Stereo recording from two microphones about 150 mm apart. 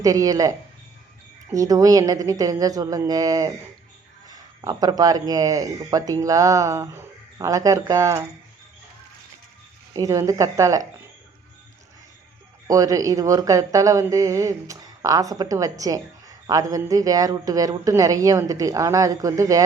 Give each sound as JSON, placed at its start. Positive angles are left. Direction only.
{"t": 0.0, "sound": "speech", "side_deg": -25}
{"t": 1.5, "sound": "speech", "side_deg": -25}
{"t": 9.9, "sound": "speech", "side_deg": -25}
{"t": 12.6, "sound": "speech", "side_deg": -25}